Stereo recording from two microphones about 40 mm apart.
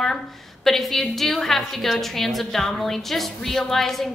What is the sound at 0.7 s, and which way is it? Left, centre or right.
A woman's voice, centre.